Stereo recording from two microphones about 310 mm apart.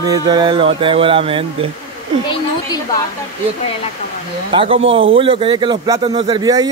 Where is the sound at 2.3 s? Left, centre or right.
Centre.